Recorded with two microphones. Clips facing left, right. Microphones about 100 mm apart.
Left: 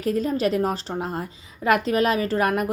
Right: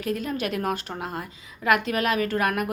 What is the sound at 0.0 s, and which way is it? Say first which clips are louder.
Speech: left 5 dB; 35° left (ahead or behind).